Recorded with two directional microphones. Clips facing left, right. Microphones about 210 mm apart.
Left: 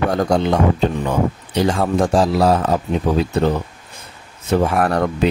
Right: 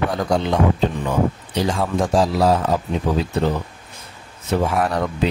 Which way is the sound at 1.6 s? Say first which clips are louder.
Left 4 dB; 55° left (ahead or behind).